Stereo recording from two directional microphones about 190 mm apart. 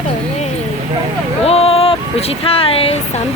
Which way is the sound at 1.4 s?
30° left (ahead or behind).